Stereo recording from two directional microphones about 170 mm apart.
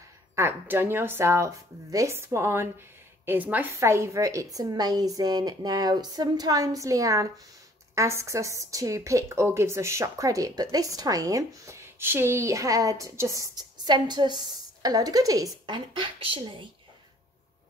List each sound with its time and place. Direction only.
0.4 s speech: 15° right (ahead or behind); by 16.6 s 30° right (ahead or behind)